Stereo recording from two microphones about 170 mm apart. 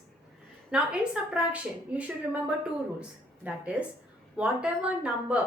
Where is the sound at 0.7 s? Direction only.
5° right (ahead or behind).